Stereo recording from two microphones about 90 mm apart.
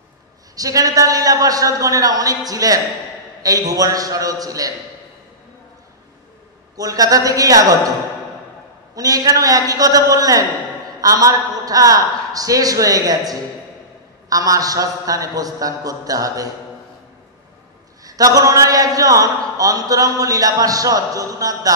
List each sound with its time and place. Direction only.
0.6 s a man's voice: 40° right (ahead or behind)
6.8 s a man's voice: 40° right (ahead or behind)
8.9 s a man's voice: 40° right (ahead or behind)
18.0 s a man's voice: 40° right (ahead or behind)